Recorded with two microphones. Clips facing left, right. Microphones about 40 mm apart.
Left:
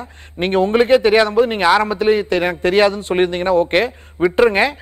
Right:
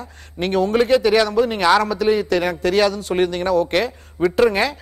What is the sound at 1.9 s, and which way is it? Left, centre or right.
A man's voice, left.